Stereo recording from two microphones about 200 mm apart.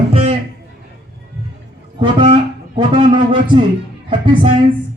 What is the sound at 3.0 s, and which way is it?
A man's voice, 25° right (ahead or behind).